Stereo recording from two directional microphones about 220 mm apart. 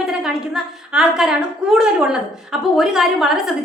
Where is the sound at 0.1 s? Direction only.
5° right (ahead or behind).